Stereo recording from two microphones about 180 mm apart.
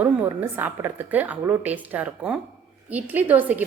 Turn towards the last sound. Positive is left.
turn(degrees=-10)  # may be behind; listen again after turning